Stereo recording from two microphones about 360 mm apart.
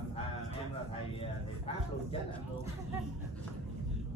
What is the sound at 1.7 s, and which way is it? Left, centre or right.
Speech, centre.